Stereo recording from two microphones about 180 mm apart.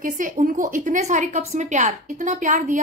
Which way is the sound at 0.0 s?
45° right (ahead or behind).